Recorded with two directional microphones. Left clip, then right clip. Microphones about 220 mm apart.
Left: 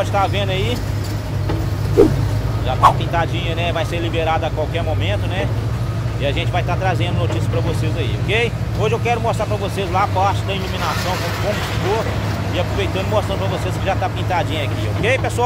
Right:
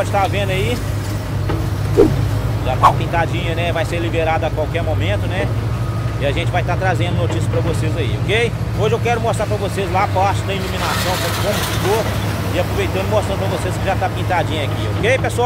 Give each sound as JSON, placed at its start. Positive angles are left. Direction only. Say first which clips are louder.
{"t": 0.0, "sound": "speech", "louder": "right 1 dB", "side_deg": 5}
{"t": 2.0, "sound": "speech", "louder": "even", "side_deg": 0}
{"t": 8.3, "sound": "speech", "louder": "right 1 dB", "side_deg": 0}
{"t": 11.0, "sound": "speech", "louder": "right 2 dB", "side_deg": -30}
{"t": 12.5, "sound": "speech", "louder": "right 2 dB", "side_deg": 0}